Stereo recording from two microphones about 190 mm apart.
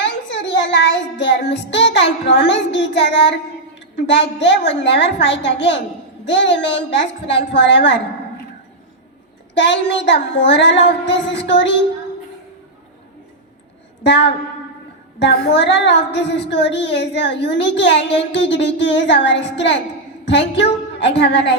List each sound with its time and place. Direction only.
0.0 s child singing: 70° left (ahead or behind)
3.8 s a woman's voice: 65° left (ahead or behind)
9.6 s a woman's voice: 65° left (ahead or behind)
14.0 s a woman's voice: 65° left (ahead or behind)